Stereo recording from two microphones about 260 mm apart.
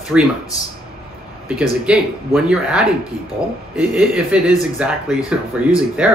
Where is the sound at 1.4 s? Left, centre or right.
Centre.